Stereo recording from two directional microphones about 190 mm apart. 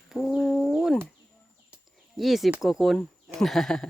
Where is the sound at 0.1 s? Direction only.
Centre (ahead or behind).